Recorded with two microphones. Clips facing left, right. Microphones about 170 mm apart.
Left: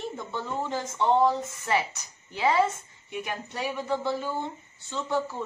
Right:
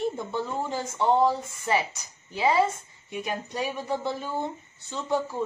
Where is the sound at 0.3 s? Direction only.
10° right (ahead or behind).